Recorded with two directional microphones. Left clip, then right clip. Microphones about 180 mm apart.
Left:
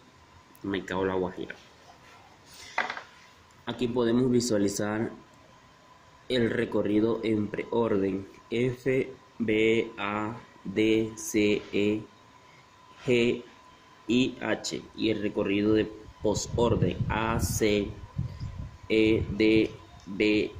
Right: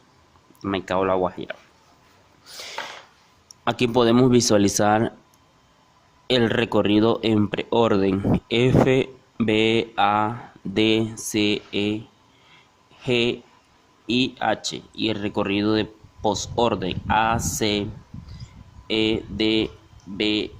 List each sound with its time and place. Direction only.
0.7 s speech: 35° right (ahead or behind)
3.7 s speech: 40° right (ahead or behind)
6.2 s speech: 40° right (ahead or behind)
13.1 s speech: 35° right (ahead or behind)
18.9 s speech: 30° right (ahead or behind)